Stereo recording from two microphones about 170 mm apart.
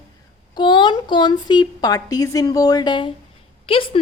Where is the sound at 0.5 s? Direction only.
25° left (ahead or behind).